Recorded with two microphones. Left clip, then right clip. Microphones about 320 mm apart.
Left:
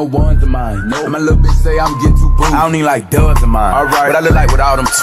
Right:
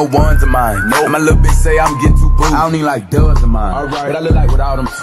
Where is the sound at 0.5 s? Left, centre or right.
Right; by 2.1 s centre.